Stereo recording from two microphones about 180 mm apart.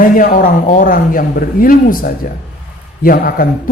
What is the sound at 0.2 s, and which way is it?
A man's voice, 50° left (ahead or behind).